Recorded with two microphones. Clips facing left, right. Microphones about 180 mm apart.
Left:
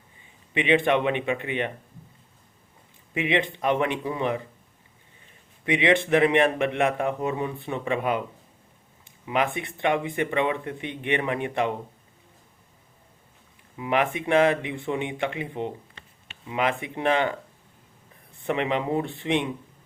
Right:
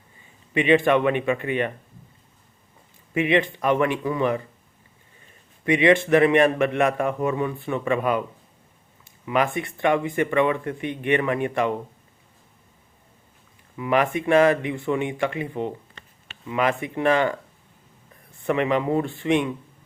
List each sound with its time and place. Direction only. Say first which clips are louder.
0.5 s speech: right 3 dB; 20° left (ahead or behind)
3.2 s speech: right 4 dB; 20° left (ahead or behind)
5.7 s speech: right 4 dB; 20° left (ahead or behind)
9.2 s speech: right 3 dB; 20° left (ahead or behind)
13.7 s speech: right 3 dB; 20° left (ahead or behind)
18.4 s speech: right 4 dB; 20° left (ahead or behind)